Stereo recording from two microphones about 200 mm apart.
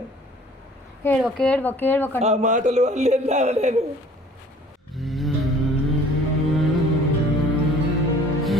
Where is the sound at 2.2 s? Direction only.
35° right (ahead or behind).